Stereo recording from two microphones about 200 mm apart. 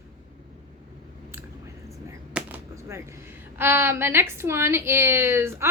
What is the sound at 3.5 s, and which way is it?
A woman's voice, 10° right (ahead or behind).